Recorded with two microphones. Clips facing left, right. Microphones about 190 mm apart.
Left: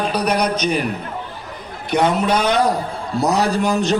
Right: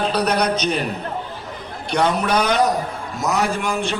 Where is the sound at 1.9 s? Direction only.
25° left (ahead or behind).